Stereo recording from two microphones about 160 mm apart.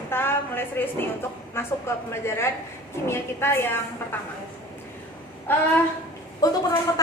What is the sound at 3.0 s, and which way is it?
A woman's voice, 15° left (ahead or behind).